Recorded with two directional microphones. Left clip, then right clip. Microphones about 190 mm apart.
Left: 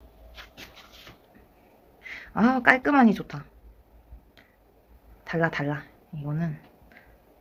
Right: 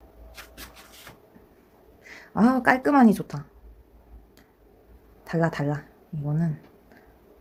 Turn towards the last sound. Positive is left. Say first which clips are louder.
# right 3 dB
turn(degrees=-20)  # may be behind; listen again after turning